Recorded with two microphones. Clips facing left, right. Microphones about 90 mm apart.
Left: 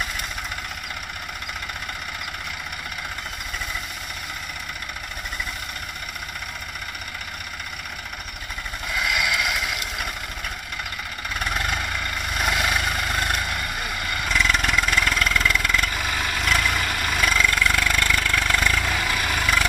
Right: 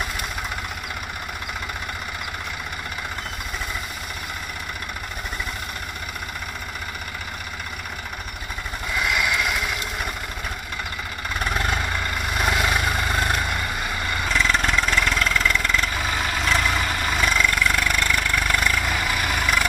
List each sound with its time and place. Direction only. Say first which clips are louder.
9.1 s vehicle: right 1 dB; 20° right (ahead or behind)
11.7 s vehicle: right 2 dB; 10° right (ahead or behind); by 15.1 s 10° left (ahead or behind)
15.1 s vehicle: even; 20° right (ahead or behind)
15.4 s vehicle: even; 10° left (ahead or behind)
15.8 s vehicle: right 1 dB; 20° right (ahead or behind)